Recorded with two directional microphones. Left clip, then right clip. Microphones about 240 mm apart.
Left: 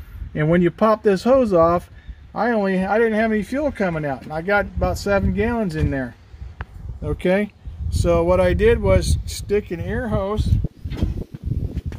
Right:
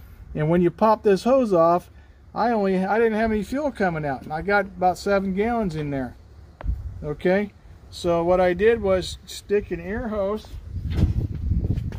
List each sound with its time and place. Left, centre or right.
0.3 s speech: left
7.1 s speech: left